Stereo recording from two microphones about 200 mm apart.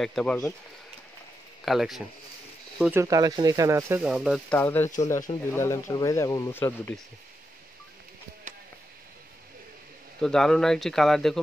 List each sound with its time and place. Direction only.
0.0 s speech: 5° left (ahead or behind)
1.6 s speech: centre (ahead or behind)
2.8 s speech: 10° right (ahead or behind)
4.0 s speech: 5° right (ahead or behind)
8.5 s a sound: 40° right (ahead or behind)
10.2 s speech: 5° left (ahead or behind)